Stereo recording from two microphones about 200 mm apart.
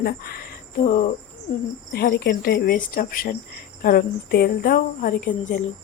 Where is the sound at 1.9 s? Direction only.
50° left (ahead or behind).